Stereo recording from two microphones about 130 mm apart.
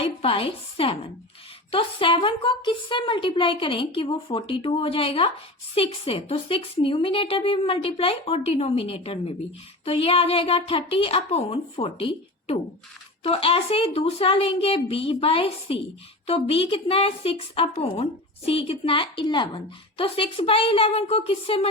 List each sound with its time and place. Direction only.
0.0 s a woman's voice: 45° left (ahead or behind)